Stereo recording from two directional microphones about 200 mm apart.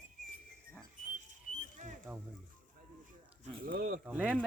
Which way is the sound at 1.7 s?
40° right (ahead or behind).